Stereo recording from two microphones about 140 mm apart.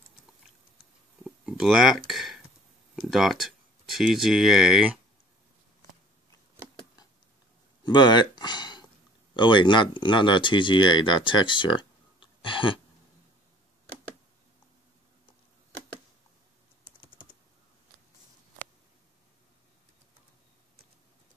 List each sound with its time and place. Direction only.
1.2 s livestock: 5° right (ahead or behind)
2.0 s speech: centre (ahead or behind)
7.8 s a sound: 30° left (ahead or behind)
9.3 s speech: 35° left (ahead or behind)